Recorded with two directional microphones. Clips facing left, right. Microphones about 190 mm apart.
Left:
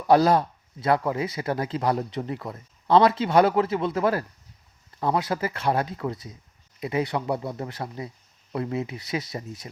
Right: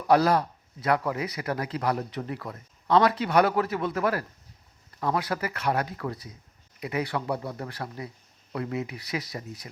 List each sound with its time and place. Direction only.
0.1 s speech: 25° left (ahead or behind)